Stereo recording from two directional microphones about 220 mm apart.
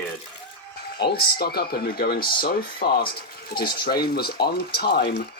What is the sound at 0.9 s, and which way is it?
Speech, 45° left (ahead or behind).